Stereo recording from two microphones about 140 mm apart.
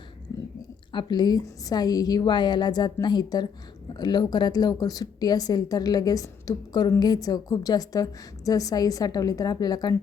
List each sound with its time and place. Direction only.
0.9 s a woman's voice: 30° left (ahead or behind)